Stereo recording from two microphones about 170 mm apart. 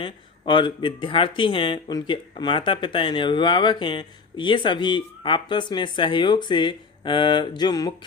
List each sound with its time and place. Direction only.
0.0 s speech: 30° left (ahead or behind)